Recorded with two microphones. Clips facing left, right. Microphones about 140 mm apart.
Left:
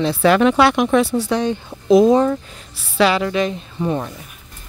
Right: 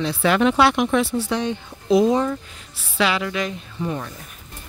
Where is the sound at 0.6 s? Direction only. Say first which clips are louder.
Left 3 dB; 50° left (ahead or behind); by 4.1 s 35° left (ahead or behind).